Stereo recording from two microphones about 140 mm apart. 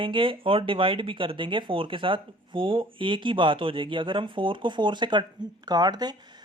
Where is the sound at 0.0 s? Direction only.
40° right (ahead or behind).